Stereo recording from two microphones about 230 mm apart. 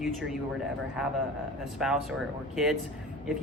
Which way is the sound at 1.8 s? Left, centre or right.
Centre.